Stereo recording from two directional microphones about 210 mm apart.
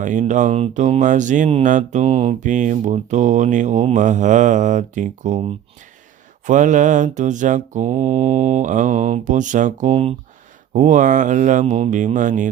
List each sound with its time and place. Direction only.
0.0 s speech: 35° right (ahead or behind)